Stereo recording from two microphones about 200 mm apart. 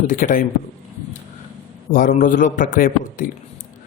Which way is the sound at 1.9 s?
40° left (ahead or behind).